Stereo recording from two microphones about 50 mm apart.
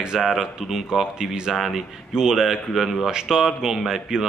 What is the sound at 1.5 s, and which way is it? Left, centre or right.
Speech, centre.